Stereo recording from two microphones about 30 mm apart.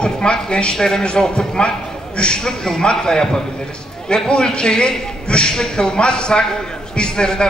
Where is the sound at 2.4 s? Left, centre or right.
Centre.